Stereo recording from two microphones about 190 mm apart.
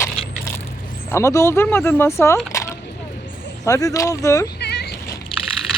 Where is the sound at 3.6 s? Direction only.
15° left (ahead or behind).